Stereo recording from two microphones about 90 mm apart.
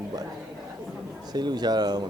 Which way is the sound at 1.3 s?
50° right (ahead or behind).